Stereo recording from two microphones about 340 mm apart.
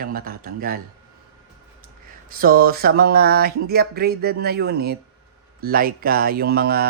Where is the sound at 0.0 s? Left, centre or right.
Right.